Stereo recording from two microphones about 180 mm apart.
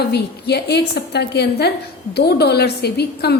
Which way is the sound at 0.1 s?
65° left (ahead or behind).